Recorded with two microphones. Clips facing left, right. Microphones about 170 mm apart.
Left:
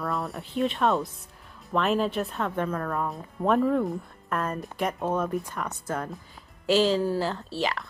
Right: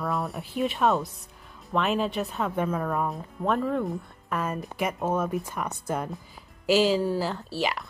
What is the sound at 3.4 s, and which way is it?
Speech, centre (ahead or behind).